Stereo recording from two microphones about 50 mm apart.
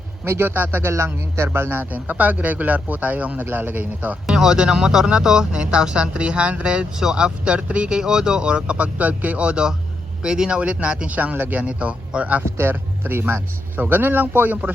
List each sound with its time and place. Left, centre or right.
0.3 s speech: right
0.9 s speech: right
1.5 s speech: right
1.8 s speech: right
3.4 s speech: right
4.3 s speech: centre
10.6 s speech: right
12.5 s speech: right